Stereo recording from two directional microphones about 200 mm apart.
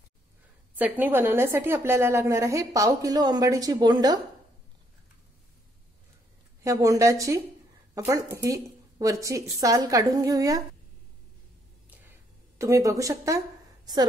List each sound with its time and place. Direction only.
0.7 s a woman's voice: 10° right (ahead or behind)
6.6 s a woman's voice: 15° right (ahead or behind)
12.5 s a woman's voice: 15° right (ahead or behind)